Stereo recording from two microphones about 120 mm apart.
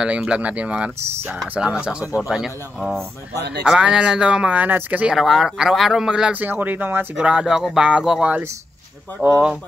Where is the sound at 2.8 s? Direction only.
20° right (ahead or behind).